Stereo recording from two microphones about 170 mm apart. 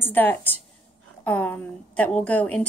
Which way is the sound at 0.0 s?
10° left (ahead or behind).